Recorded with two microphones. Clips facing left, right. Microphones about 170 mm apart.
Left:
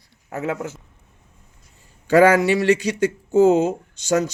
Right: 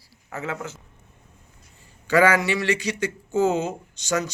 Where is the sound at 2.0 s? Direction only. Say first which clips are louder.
Left 5 dB; 45° left (ahead or behind).